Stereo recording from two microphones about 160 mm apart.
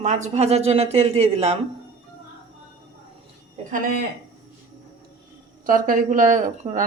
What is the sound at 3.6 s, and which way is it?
Speech, 55° right (ahead or behind).